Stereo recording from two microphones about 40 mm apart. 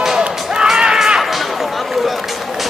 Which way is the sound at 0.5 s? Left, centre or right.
Centre.